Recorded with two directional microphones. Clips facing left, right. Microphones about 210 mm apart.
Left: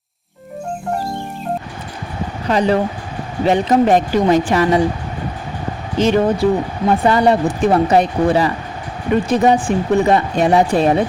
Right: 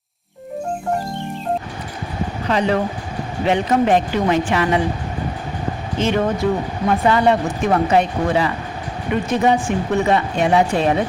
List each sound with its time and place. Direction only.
2.5 s speech: 35° left (ahead or behind)
6.0 s speech: 35° left (ahead or behind)